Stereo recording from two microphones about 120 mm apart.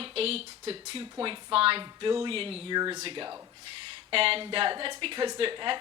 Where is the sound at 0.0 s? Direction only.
55° right (ahead or behind).